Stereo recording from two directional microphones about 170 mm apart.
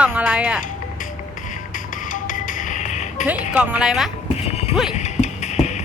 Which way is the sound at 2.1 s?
50° left (ahead or behind).